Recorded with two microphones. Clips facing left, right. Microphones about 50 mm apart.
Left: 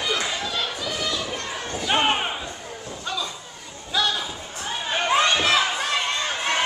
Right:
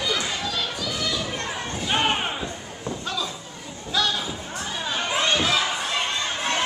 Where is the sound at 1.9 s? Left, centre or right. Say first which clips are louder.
Left 2 dB; centre.